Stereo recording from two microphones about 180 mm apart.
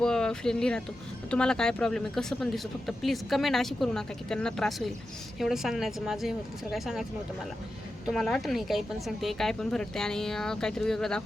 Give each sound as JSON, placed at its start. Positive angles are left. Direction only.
{"t": 0.0, "sound": "speech", "side_deg": 5}
{"t": 8.0, "sound": "speech", "side_deg": 0}